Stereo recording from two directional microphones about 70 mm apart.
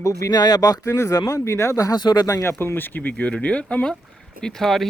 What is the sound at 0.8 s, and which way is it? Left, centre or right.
Speech, left.